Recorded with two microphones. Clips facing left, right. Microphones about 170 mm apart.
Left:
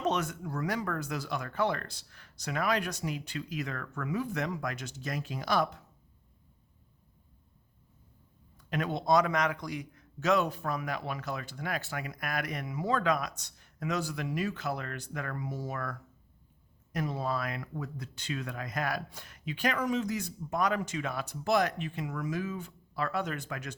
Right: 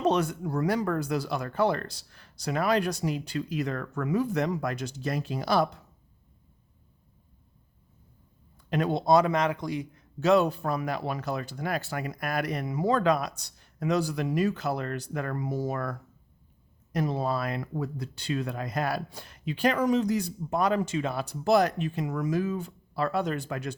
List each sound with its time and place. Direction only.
0.0 s a man's voice: 35° right (ahead or behind)
8.7 s a man's voice: 35° right (ahead or behind)